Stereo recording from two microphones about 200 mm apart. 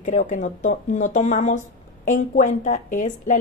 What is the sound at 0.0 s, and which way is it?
A woman's voice, 40° left (ahead or behind).